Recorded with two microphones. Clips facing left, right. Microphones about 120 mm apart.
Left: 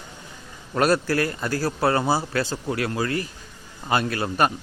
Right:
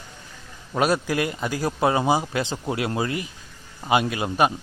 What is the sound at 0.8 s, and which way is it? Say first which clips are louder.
A man's voice: left 1 dB; 10° right (ahead or behind).